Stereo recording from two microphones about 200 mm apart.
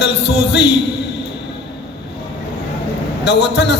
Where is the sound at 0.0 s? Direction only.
60° left (ahead or behind).